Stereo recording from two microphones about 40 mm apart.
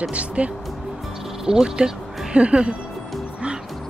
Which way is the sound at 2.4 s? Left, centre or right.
Right.